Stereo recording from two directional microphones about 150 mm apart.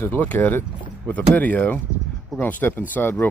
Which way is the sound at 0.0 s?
10° left (ahead or behind).